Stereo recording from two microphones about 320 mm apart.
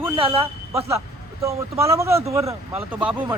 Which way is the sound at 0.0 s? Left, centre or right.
Centre.